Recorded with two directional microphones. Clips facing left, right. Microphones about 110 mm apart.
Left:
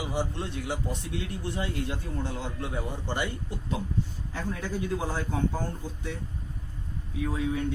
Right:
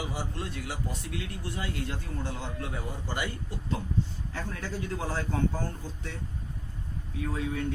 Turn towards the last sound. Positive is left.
turn(degrees=15)  # may be behind; listen again after turning